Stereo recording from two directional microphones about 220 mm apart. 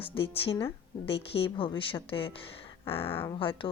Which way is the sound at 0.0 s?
25° left (ahead or behind).